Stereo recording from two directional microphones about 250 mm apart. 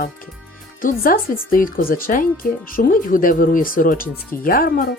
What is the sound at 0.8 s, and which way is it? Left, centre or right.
Speech, left.